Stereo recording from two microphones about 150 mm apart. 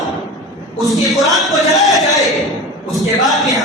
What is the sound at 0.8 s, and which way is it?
A man's voice, centre (ahead or behind).